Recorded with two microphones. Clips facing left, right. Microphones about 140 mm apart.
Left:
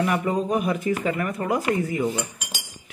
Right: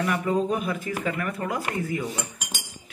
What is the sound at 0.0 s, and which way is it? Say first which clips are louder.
Speech: left 1 dB; 25° left (ahead or behind).